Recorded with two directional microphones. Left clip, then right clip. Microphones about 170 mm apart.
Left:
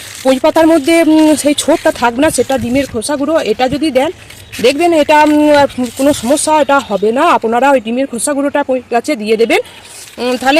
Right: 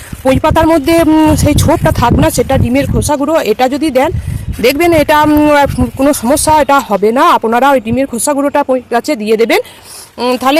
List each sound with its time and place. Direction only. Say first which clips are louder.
0.3 s speech: even; 10° right (ahead or behind)